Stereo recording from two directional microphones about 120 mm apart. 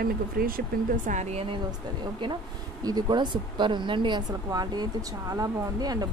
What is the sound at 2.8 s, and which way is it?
Speech, 35° right (ahead or behind).